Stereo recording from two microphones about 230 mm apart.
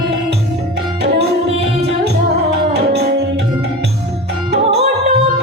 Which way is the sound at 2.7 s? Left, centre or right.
Right.